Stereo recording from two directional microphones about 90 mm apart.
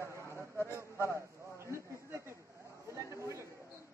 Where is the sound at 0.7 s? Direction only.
30° right (ahead or behind).